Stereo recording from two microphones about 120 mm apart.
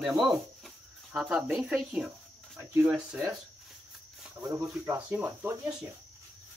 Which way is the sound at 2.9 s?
5° right (ahead or behind).